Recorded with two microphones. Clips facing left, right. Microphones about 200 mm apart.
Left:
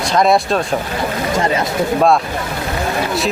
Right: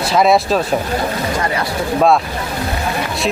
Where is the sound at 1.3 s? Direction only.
25° left (ahead or behind).